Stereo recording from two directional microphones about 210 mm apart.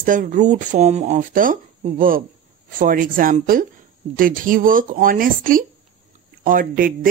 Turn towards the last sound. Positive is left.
turn(degrees=-40)  # may be behind; listen again after turning